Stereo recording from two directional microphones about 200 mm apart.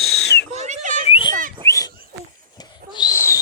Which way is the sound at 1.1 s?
25° left (ahead or behind).